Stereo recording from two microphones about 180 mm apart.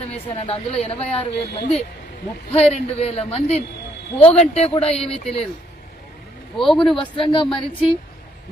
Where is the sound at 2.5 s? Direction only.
35° left (ahead or behind).